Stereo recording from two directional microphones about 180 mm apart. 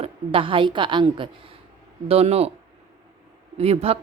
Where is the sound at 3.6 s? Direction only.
35° right (ahead or behind).